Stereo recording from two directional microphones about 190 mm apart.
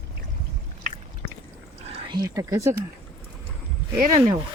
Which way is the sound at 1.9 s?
20° right (ahead or behind).